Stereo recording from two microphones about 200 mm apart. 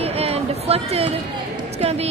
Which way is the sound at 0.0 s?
30° right (ahead or behind).